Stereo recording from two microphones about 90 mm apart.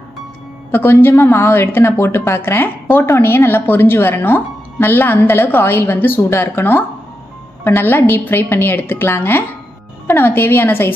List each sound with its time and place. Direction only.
0.7 s a woman's voice: 25° left (ahead or behind)